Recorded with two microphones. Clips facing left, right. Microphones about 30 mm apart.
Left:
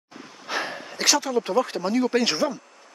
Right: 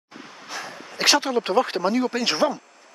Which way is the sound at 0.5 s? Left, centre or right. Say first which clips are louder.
Left 6 dB; left.